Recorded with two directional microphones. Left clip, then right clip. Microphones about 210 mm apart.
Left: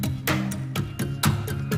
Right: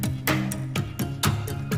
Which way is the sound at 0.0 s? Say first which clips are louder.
Right 1 dB; 5° right (ahead or behind).